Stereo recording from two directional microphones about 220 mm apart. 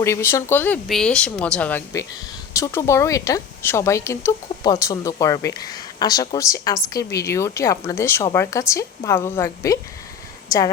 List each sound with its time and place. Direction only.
0.0 s speech: 10° left (ahead or behind)